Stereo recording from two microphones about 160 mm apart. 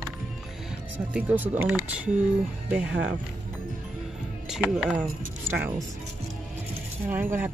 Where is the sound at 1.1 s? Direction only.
10° right (ahead or behind).